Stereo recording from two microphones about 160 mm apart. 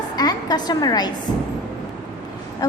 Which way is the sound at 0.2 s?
25° left (ahead or behind).